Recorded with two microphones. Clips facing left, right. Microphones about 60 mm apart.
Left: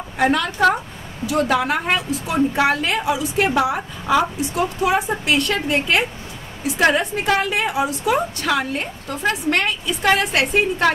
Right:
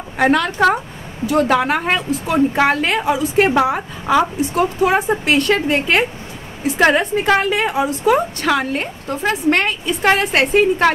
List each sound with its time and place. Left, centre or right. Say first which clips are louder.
0.2 s a woman's voice: right 3 dB; right